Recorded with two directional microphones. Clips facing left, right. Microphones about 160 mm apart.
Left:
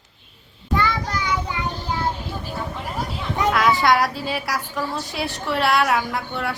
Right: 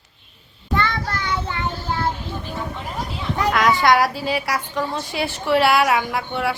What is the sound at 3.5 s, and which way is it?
A woman's voice, centre (ahead or behind).